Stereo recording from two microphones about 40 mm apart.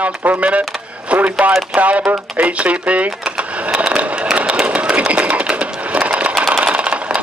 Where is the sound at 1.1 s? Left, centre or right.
Right.